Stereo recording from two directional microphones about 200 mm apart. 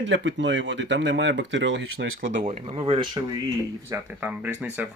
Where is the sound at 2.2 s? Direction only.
40° right (ahead or behind); by 3.4 s 20° right (ahead or behind).